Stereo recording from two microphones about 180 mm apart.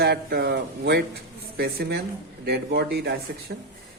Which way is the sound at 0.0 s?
60° right (ahead or behind).